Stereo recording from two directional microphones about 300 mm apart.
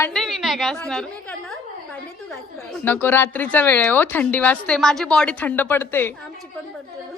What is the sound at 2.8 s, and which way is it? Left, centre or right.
Speech, centre.